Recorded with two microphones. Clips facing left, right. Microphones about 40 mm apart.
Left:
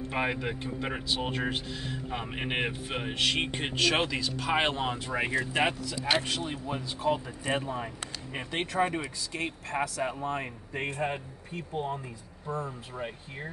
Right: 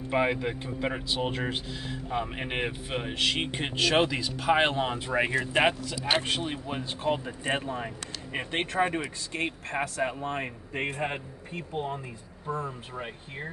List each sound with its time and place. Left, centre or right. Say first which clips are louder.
0.1 s speech: right 5 dB; centre
4.9 s speech: right 3 dB; right